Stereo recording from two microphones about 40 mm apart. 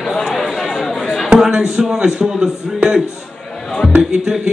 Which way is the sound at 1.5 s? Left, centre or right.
Centre.